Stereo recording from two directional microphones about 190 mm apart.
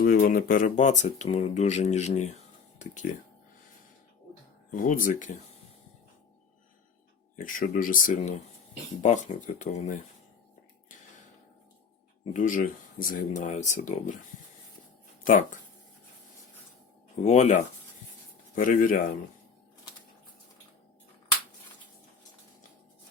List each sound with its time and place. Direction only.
0.0 s speech: 45° left (ahead or behind)
4.7 s speech: 45° left (ahead or behind)
7.3 s speech: 45° left (ahead or behind)
12.3 s speech: 45° left (ahead or behind)
15.2 s speech: 45° left (ahead or behind)
17.2 s speech: 35° left (ahead or behind)